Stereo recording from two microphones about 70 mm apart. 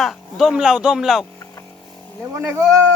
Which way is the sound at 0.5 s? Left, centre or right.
Centre.